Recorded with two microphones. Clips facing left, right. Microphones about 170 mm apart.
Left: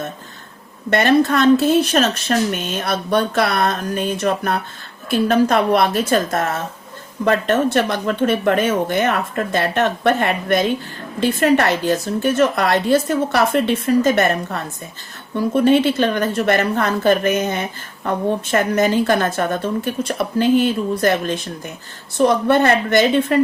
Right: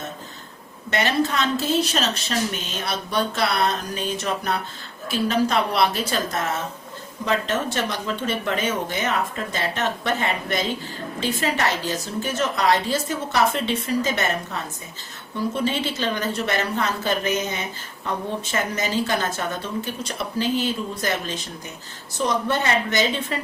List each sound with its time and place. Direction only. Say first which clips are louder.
0.9 s a woman's voice: left 8 dB; 55° left (ahead or behind)